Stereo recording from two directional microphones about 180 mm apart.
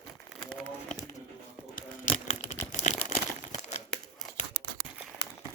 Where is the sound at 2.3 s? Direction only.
40° left (ahead or behind).